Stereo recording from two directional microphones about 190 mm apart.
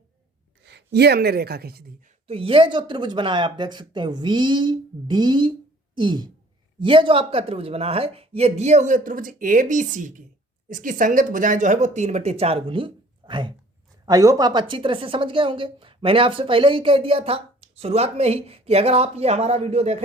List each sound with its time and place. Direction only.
0.6 s a woman's voice: 60° right (ahead or behind)
2.2 s a woman's voice: 30° right (ahead or behind)